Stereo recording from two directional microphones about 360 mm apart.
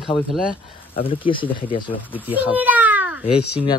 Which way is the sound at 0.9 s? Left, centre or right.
Centre.